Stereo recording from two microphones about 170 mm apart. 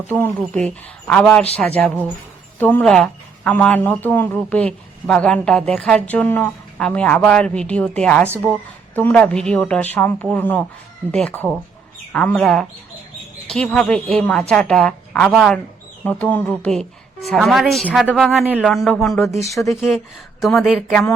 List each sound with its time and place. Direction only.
0.1 s a woman's voice: 10° left (ahead or behind)